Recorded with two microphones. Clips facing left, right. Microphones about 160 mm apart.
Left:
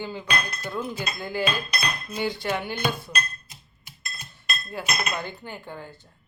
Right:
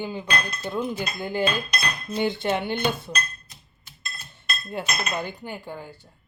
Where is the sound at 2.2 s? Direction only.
25° right (ahead or behind).